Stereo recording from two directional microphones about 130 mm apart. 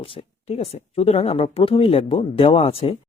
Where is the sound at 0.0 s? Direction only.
45° left (ahead or behind).